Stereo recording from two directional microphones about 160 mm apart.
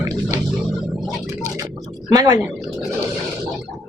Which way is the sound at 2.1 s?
25° right (ahead or behind).